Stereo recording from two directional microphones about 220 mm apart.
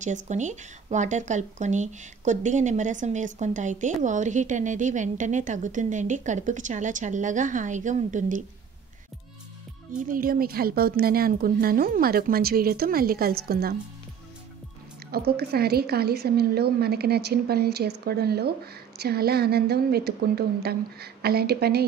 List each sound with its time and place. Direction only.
0.0 s speech: 35° right (ahead or behind)
9.9 s a woman's voice: 40° right (ahead or behind)
15.0 s a woman's voice: 45° right (ahead or behind)